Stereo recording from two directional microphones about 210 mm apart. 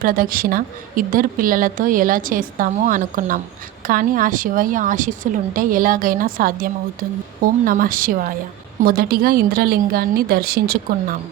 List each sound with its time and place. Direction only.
0.0 s a woman's voice: 40° right (ahead or behind)